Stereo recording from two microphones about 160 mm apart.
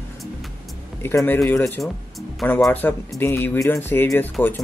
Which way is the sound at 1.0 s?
15° left (ahead or behind).